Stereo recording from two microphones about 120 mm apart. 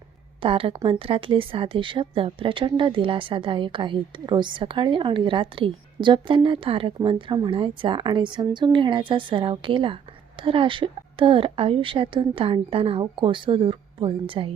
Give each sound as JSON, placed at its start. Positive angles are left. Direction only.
{"t": 0.4, "sound": "speech", "side_deg": -50}